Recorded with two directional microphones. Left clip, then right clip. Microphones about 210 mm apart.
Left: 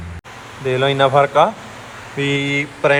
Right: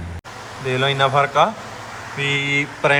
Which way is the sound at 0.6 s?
10° right (ahead or behind).